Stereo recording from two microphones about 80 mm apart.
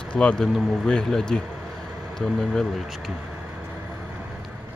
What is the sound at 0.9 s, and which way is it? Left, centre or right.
Speech, centre.